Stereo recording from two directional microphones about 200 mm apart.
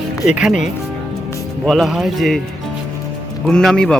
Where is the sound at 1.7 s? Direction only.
Centre (ahead or behind).